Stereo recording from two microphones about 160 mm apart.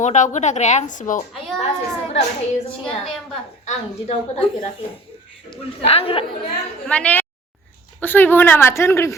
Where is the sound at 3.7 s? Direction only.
40° left (ahead or behind).